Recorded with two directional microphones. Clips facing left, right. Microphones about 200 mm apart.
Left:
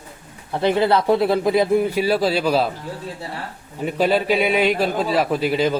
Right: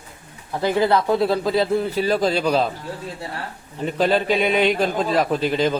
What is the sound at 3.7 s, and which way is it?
A man's voice, 10° left (ahead or behind).